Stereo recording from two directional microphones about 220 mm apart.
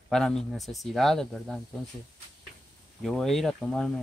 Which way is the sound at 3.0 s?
Centre (ahead or behind).